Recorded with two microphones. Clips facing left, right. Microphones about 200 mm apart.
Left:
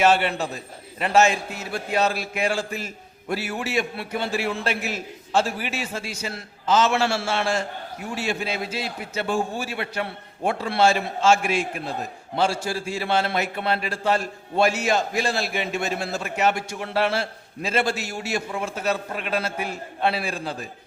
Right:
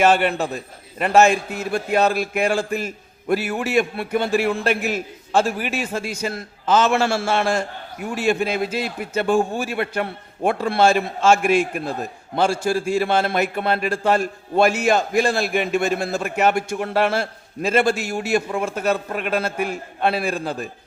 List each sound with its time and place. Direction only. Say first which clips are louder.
0.0 s a man's voice: right 3 dB; 50° right (ahead or behind)